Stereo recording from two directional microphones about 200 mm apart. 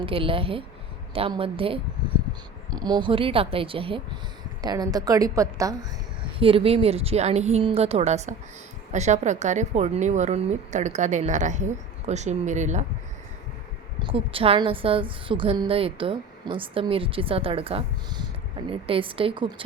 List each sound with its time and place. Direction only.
0.0 s a woman's voice: 25° right (ahead or behind)
6.4 s a woman's voice: 30° right (ahead or behind)
14.0 s a woman's voice: 25° right (ahead or behind)